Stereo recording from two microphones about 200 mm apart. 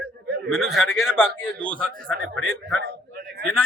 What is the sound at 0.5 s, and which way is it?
A man's voice, centre (ahead or behind).